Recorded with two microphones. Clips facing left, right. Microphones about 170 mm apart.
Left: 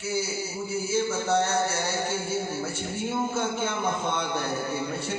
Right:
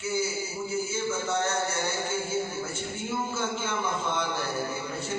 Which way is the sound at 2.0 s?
35° left (ahead or behind).